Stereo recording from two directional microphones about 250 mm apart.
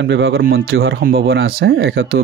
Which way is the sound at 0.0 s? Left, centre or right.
Right.